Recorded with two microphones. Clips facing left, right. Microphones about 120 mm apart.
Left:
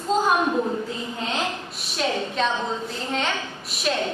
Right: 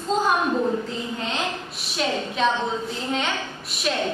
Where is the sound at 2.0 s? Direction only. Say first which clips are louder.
Right 1 dB; centre (ahead or behind).